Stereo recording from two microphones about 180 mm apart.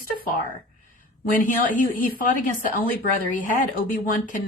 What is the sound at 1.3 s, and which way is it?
A woman's voice, 50° left (ahead or behind).